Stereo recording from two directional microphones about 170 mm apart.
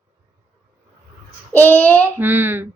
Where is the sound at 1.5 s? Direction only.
10° left (ahead or behind).